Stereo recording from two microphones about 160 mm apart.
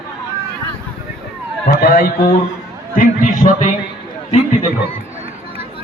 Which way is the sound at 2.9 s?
60° left (ahead or behind).